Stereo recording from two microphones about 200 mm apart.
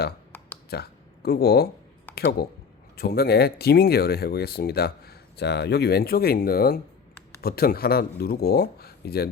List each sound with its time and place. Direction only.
0.7 s speech: 50° left (ahead or behind)